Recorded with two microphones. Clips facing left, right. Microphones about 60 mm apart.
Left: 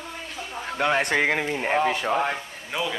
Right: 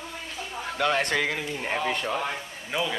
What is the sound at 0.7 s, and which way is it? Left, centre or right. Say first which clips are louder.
Speech: left 2 dB; left.